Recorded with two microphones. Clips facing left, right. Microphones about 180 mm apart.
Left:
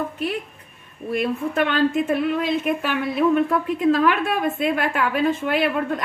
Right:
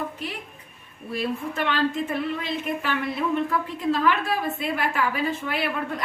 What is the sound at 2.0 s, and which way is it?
Speech, 60° left (ahead or behind).